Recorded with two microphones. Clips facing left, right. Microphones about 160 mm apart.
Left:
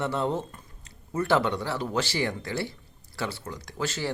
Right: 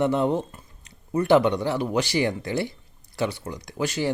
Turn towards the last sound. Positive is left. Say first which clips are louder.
# right 5 dB
turn(degrees=-15)  # may be behind; listen again after turning